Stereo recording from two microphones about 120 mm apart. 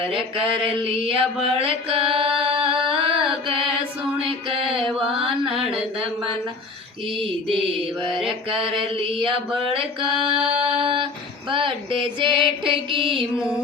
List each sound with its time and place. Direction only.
0.1 s a sound: 50° right (ahead or behind)
2.4 s music: 50° right (ahead or behind)
4.2 s mantra: 50° right (ahead or behind)
7.6 s a sound: 50° right (ahead or behind)
10.4 s music: 5° right (ahead or behind)
10.8 s female singing: 45° right (ahead or behind)